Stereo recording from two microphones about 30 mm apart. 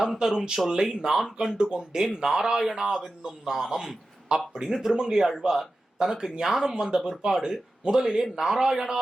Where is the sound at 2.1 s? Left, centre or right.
Centre.